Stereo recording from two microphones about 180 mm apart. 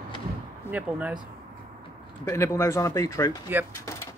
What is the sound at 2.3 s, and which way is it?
Speech, 15° left (ahead or behind).